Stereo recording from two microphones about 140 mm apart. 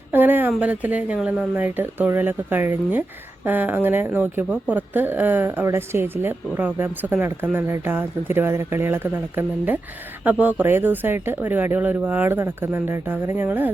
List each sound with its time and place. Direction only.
0.1 s a woman's voice: 15° right (ahead or behind)